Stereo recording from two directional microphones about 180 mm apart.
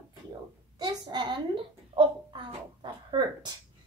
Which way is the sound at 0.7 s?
25° right (ahead or behind).